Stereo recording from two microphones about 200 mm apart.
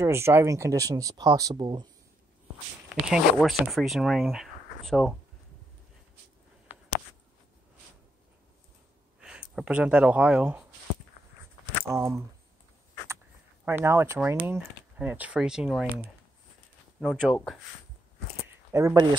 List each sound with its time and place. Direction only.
0.0 s speech: 10° right (ahead or behind)
2.9 s speech: centre (ahead or behind)
9.2 s speech: 5° right (ahead or behind)
11.9 s speech: 15° right (ahead or behind)
13.7 s speech: 10° right (ahead or behind)
17.0 s speech: centre (ahead or behind)
18.7 s speech: 15° right (ahead or behind)